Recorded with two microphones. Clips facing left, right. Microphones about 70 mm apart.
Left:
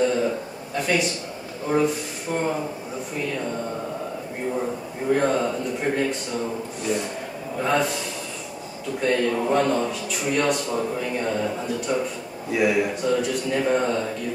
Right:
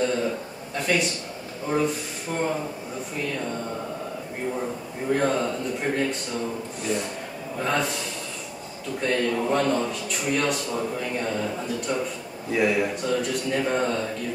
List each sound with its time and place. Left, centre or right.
0.0 s a sound: centre
0.7 s a man's voice: centre
5.1 s a man's voice: centre
9.0 s a man's voice: centre